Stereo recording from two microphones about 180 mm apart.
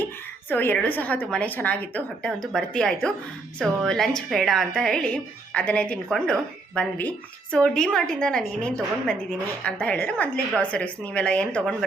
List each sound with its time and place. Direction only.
0.5 s a woman's voice: 10° left (ahead or behind)